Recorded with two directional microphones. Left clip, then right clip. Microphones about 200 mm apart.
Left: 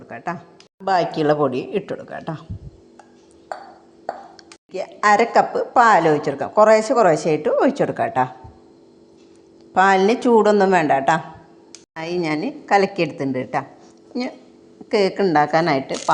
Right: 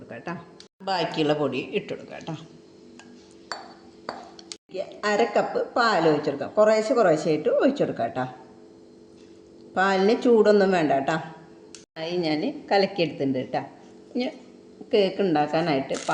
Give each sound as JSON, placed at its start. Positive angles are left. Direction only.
{"t": 0.1, "sound": "a woman's voice", "side_deg": 20}
{"t": 0.9, "sound": "a woman's voice", "side_deg": 35}
{"t": 4.9, "sound": "a woman's voice", "side_deg": 35}
{"t": 9.7, "sound": "a woman's voice", "side_deg": 35}
{"t": 14.8, "sound": "a woman's voice", "side_deg": 30}